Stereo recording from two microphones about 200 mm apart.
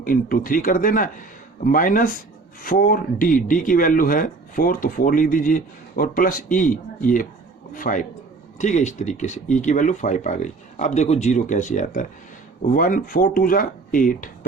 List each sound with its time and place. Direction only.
0.0 s speech: 45° left (ahead or behind)